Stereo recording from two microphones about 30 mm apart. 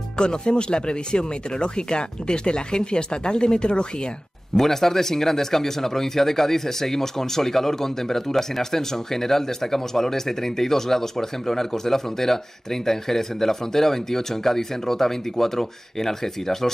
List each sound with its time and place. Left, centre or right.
0.2 s speech: left
4.6 s speech: centre